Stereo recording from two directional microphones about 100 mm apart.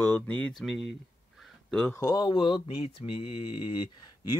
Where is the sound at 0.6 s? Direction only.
Centre (ahead or behind).